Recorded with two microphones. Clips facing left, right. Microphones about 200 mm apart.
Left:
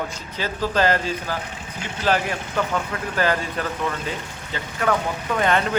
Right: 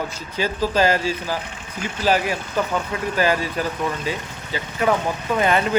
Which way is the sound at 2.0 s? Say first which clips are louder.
Right 2 dB; 10° right (ahead or behind).